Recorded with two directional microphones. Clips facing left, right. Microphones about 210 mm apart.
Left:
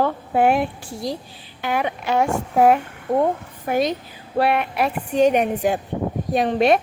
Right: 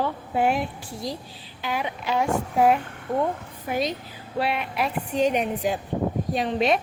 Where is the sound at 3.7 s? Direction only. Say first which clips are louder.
Left 6 dB; 60° left (ahead or behind).